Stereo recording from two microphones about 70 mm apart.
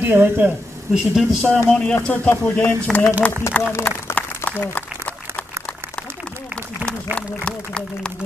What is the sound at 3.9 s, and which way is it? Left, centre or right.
Speech, centre.